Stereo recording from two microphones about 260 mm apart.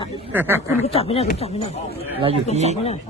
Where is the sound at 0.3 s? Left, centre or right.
Centre.